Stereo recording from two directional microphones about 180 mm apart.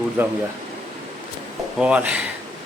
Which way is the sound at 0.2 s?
10° right (ahead or behind).